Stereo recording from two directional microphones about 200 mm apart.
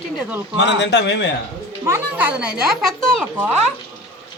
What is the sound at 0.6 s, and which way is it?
Speech, 60° left (ahead or behind).